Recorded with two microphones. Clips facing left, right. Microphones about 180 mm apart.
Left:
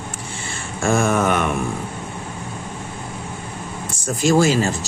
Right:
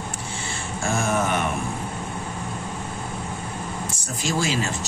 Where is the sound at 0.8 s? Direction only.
90° left.